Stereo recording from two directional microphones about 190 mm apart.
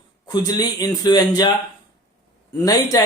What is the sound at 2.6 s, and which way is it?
Speech, 20° left (ahead or behind).